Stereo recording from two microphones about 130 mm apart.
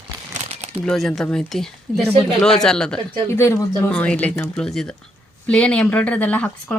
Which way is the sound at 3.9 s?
10° left (ahead or behind).